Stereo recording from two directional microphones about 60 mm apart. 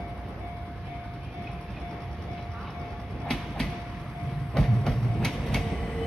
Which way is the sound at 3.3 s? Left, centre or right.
Centre.